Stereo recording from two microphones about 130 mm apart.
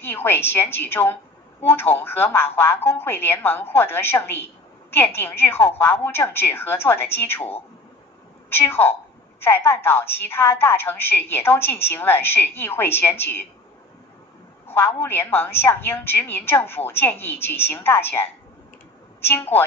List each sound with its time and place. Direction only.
0.0 s a woman's voice: 15° left (ahead or behind)
8.5 s a woman's voice: 15° left (ahead or behind)
14.7 s a woman's voice: 15° left (ahead or behind)